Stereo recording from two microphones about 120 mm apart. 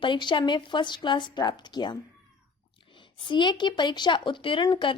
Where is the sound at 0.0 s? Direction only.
40° left (ahead or behind).